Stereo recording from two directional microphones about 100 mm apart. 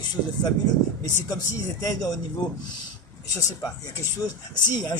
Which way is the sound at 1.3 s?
35° left (ahead or behind).